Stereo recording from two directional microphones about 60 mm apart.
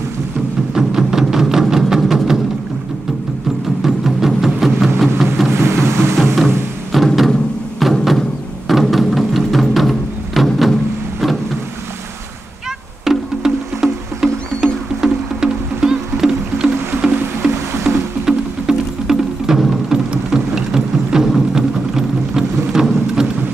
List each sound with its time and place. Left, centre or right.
0.7 s music: centre
3.8 s music: centre
5.0 s a sound: centre
5.5 s music: right
6.3 s music: centre
7.8 s a sound: centre
8.6 s music: centre
13.0 s music: centre